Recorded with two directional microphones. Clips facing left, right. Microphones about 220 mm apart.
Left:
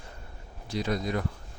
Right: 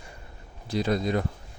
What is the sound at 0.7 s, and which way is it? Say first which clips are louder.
Speech: right 4 dB; 30° right (ahead or behind).